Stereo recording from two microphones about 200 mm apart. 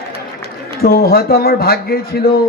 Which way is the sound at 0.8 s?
50° left (ahead or behind).